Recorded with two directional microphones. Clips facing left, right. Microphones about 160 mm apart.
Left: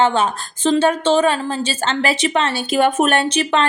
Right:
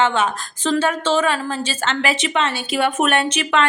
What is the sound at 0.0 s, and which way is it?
A woman's voice, 35° left (ahead or behind).